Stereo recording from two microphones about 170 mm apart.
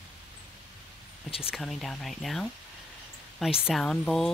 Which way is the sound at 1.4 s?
Centre (ahead or behind).